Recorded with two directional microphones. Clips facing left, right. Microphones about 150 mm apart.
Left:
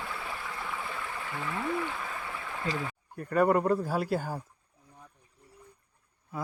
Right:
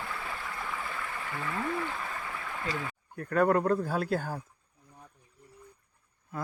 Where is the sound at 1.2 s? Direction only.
10° left (ahead or behind).